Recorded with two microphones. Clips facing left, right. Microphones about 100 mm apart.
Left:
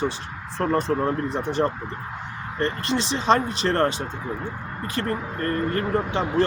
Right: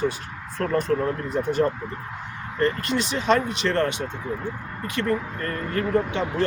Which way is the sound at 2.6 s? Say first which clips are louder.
Right 2 dB; 25° left (ahead or behind).